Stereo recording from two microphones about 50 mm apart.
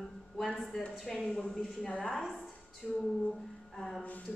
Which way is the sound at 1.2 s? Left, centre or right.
Centre.